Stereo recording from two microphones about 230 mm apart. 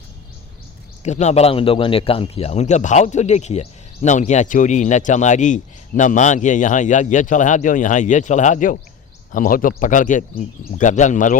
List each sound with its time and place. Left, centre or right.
1.0 s a man's voice: left